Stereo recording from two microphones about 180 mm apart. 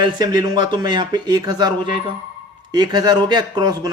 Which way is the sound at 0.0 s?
25° right (ahead or behind).